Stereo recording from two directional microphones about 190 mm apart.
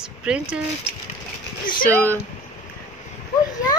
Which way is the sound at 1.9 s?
10° left (ahead or behind).